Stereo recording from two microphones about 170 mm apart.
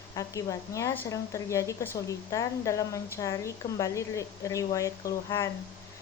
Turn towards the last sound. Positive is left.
turn(degrees=20)  # may be behind; listen again after turning